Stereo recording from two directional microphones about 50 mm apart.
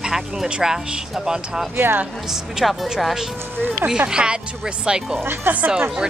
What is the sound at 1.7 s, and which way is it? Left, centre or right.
Speech, right.